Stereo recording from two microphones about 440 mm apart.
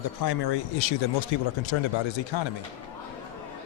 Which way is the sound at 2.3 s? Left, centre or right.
Left.